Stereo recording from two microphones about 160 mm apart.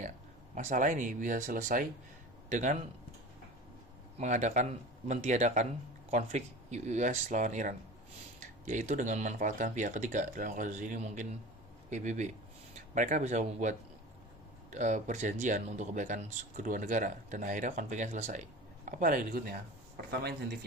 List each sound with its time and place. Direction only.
0.5 s speech: 50° right (ahead or behind)
4.2 s speech: 45° right (ahead or behind)